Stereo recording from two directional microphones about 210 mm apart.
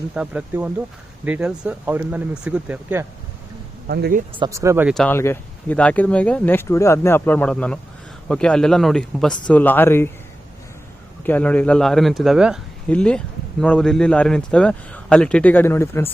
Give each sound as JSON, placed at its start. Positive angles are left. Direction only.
{"t": 0.1, "sound": "a man's voice", "side_deg": -5}
{"t": 3.8, "sound": "speech", "side_deg": -50}
{"t": 4.4, "sound": "speech", "side_deg": -15}
{"t": 4.9, "sound": "a man's voice", "side_deg": 10}
{"t": 11.2, "sound": "a man's voice", "side_deg": 10}